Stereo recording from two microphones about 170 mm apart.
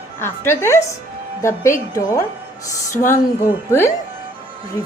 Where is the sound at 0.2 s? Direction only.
15° left (ahead or behind).